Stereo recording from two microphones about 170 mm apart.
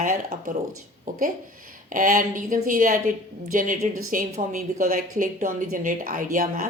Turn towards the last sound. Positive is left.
turn(degrees=-50)  # may be behind; listen again after turning